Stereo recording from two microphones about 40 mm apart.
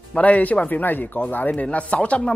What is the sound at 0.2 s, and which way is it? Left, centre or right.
Speech, left.